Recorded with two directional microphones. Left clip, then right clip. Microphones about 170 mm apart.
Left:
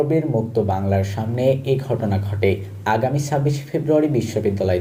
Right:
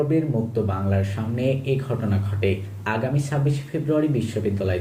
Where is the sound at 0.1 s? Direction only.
25° left (ahead or behind).